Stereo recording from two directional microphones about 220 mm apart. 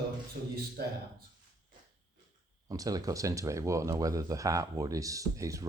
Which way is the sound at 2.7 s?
15° right (ahead or behind).